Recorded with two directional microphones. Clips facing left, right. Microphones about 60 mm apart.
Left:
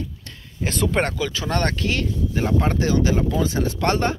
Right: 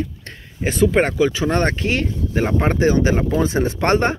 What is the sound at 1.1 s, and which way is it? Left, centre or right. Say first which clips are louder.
Speech: right 7 dB; right.